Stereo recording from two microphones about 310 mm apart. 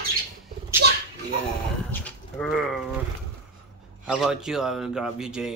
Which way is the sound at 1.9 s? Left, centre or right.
Centre.